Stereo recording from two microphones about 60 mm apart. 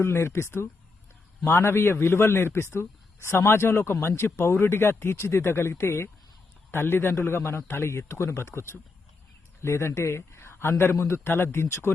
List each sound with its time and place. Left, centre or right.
0.0 s a man's voice: left